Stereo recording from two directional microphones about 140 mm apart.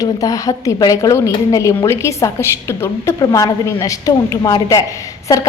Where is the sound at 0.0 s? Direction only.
25° left (ahead or behind).